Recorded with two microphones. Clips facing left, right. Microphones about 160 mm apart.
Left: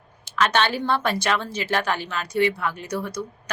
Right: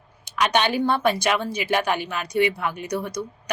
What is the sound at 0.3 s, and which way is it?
A woman's voice, 15° right (ahead or behind).